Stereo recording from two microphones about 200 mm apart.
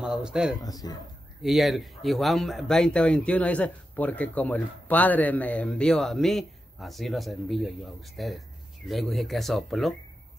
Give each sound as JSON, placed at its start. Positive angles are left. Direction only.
{"t": 0.0, "sound": "speech", "side_deg": -5}
{"t": 0.6, "sound": "speech", "side_deg": 20}
{"t": 1.4, "sound": "speech", "side_deg": 0}